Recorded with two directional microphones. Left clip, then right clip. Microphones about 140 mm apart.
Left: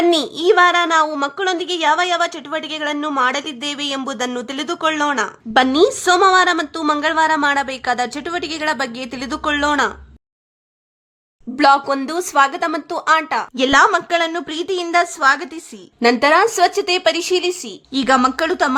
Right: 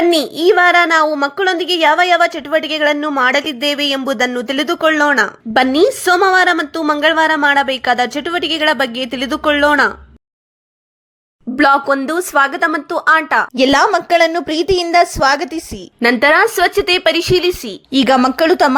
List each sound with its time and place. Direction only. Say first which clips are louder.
0.1 s speech: right 3 dB; 15° right (ahead or behind)
11.5 s a woman's voice: right 2 dB; 20° right (ahead or behind)
17.9 s a woman's voice: right 3 dB; 30° right (ahead or behind)